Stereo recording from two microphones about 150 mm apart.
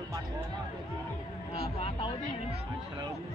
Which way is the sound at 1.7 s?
35° left (ahead or behind).